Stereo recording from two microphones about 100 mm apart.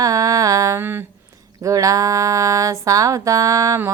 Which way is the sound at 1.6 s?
35° right (ahead or behind).